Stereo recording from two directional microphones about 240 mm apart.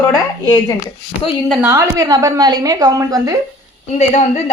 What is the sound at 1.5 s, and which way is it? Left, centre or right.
A woman's voice, centre.